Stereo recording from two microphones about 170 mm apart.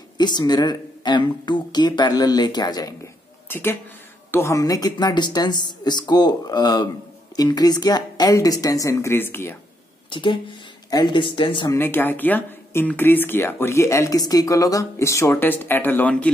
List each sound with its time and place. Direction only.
0.2 s speech: 25° left (ahead or behind)
3.4 s speech: 10° left (ahead or behind)
10.0 s speech: 30° left (ahead or behind)
11.7 s speech: 10° left (ahead or behind)